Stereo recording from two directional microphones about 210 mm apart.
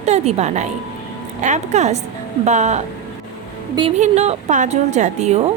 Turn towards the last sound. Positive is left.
turn(degrees=-30)  # may be behind; listen again after turning